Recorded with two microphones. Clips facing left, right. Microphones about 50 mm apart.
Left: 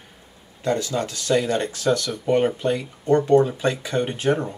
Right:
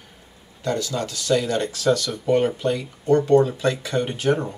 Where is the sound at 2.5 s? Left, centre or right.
Left.